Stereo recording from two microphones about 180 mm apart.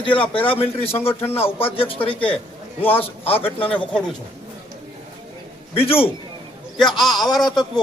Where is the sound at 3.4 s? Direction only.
30° left (ahead or behind).